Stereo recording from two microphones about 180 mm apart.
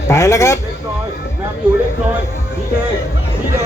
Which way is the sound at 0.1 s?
15° left (ahead or behind).